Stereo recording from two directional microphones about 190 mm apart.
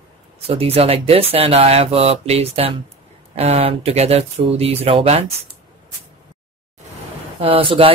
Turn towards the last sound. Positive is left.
turn(degrees=-30)  # may be behind; listen again after turning